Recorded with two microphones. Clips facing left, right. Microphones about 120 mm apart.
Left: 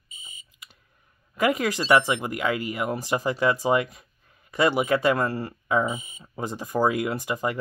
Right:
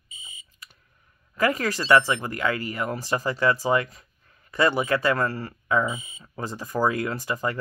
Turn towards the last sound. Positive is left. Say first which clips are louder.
# left 1 dB
turn(degrees=15)  # may be behind; listen again after turning